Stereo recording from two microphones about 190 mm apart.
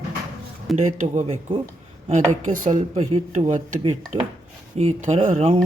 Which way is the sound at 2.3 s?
45° right (ahead or behind).